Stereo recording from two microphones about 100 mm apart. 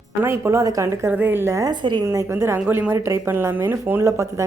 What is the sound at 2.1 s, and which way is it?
Speech, 30° right (ahead or behind).